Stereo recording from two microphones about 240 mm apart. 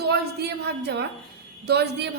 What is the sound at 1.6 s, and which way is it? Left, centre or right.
Speech, right.